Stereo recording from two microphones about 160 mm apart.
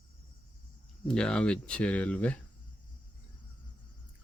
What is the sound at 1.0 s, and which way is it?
Speech, 5° left (ahead or behind).